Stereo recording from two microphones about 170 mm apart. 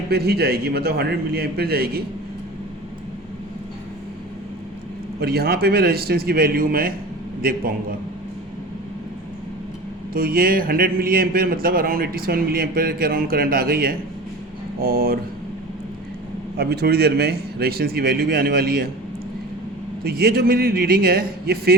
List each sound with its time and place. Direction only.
0.1 s a man's voice: 70° right (ahead or behind)
5.2 s a man's voice: 70° right (ahead or behind)
10.2 s a man's voice: 60° right (ahead or behind)
16.6 s a man's voice: 70° right (ahead or behind)
20.1 s a man's voice: 65° right (ahead or behind)